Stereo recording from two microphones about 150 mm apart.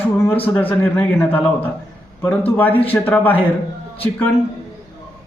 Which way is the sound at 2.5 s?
10° left (ahead or behind).